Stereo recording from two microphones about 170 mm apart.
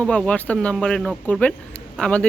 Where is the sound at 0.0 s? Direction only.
5° left (ahead or behind).